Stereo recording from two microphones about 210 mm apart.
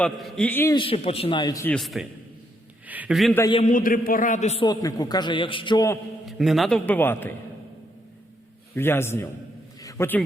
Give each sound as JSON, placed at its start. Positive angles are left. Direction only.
{"t": 0.0, "sound": "a man's voice", "side_deg": 0}
{"t": 0.8, "sound": "a man's voice", "side_deg": 25}
{"t": 1.7, "sound": "a man's voice", "side_deg": 0}
{"t": 2.8, "sound": "a sound", "side_deg": -5}
{"t": 3.3, "sound": "a man's voice", "side_deg": 15}
{"t": 3.6, "sound": "a man's voice", "side_deg": 40}
{"t": 6.2, "sound": "a man's voice", "side_deg": 0}
{"t": 8.7, "sound": "a man's voice", "side_deg": 10}
{"t": 9.8, "sound": "a sound", "side_deg": 10}